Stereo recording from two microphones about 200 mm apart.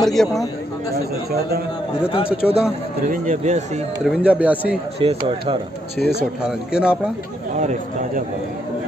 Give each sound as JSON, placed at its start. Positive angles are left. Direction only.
{"t": 0.0, "sound": "a man's voice", "side_deg": 0}
{"t": 2.0, "sound": "a man's voice", "side_deg": 30}
{"t": 2.4, "sound": "a man's voice", "side_deg": -5}
{"t": 3.1, "sound": "speech", "side_deg": -35}
{"t": 4.0, "sound": "speech", "side_deg": -5}
{"t": 5.0, "sound": "speech", "side_deg": -25}
{"t": 6.4, "sound": "a man's voice", "side_deg": -5}